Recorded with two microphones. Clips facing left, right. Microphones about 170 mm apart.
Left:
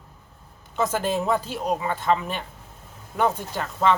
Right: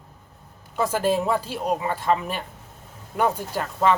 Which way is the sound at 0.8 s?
5° right (ahead or behind).